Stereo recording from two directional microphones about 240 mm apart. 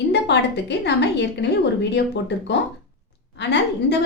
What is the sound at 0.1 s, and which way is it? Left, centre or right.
A woman's voice, left.